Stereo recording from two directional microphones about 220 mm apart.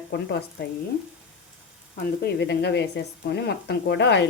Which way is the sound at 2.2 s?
50° left (ahead or behind).